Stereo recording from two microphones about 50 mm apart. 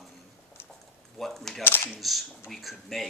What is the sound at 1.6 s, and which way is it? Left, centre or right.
Speech, left.